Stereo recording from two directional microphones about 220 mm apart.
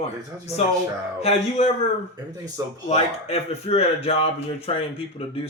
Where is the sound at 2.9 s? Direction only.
30° left (ahead or behind).